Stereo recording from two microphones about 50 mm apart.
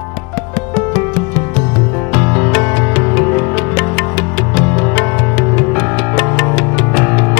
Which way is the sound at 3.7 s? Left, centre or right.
Centre.